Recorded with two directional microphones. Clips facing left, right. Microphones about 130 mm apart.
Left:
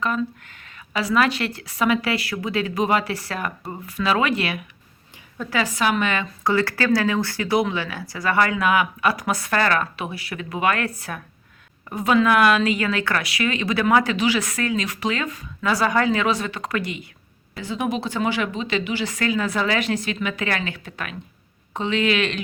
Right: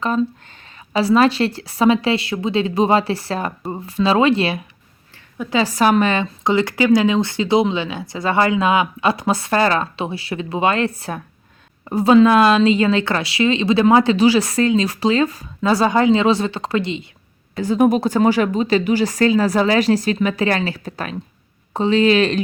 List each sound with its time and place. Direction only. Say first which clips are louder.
0.0 s speech: right 5 dB; 30° right (ahead or behind)
17.6 s speech: right 10 dB; 45° right (ahead or behind)